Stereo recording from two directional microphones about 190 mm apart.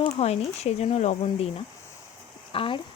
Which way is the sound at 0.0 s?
35° left (ahead or behind).